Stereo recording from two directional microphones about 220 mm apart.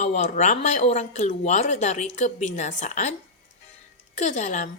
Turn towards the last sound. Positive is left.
turn(degrees=30)  # may be behind; listen again after turning